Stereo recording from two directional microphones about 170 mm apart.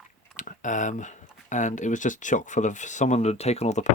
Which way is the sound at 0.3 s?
50° left (ahead or behind).